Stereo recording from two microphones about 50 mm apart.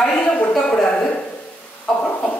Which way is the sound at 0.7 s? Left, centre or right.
Centre.